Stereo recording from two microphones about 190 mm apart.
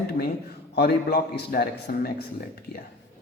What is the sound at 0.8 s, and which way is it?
Speech, 55° left (ahead or behind).